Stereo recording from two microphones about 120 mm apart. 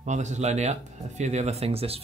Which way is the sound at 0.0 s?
75° right (ahead or behind).